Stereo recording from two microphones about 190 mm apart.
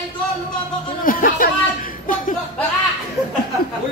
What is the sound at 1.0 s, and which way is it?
Speech, 50° left (ahead or behind).